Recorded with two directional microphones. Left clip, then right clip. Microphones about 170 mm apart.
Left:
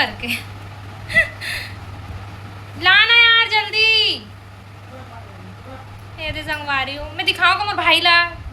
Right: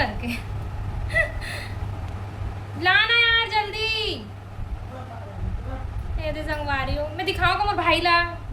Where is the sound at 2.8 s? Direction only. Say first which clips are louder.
Left 7 dB; centre (ahead or behind).